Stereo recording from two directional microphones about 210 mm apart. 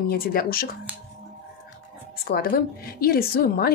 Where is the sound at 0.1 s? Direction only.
45° left (ahead or behind).